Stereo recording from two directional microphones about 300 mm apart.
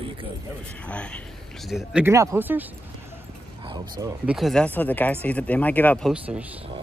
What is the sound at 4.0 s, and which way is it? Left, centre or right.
Speech, centre.